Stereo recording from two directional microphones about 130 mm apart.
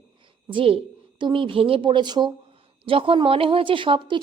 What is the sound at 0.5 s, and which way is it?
A woman's voice, 45° right (ahead or behind).